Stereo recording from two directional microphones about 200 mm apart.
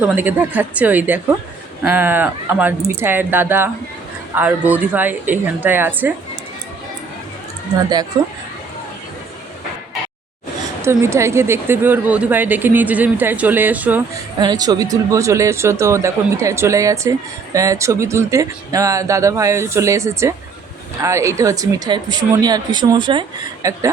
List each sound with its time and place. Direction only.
0.0 s speech: 10° right (ahead or behind)
8.1 s speech: 20° right (ahead or behind)
10.8 s speech: 15° right (ahead or behind)
14.3 s speech: 20° right (ahead or behind)